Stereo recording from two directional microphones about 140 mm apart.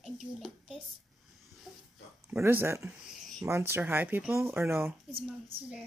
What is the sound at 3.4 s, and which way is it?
Speech, 20° right (ahead or behind).